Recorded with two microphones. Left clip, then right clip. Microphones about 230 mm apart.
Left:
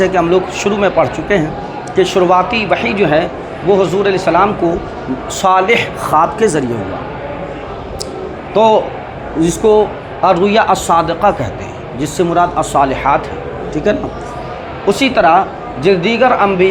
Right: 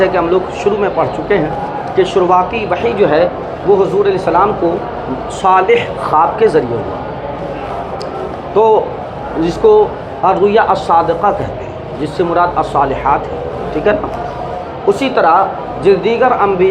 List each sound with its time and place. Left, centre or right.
0.0 s speech: left
8.5 s speech: left